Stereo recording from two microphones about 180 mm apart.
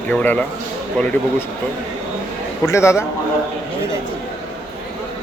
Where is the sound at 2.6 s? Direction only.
15° left (ahead or behind).